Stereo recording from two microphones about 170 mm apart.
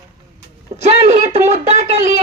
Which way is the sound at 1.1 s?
40° right (ahead or behind).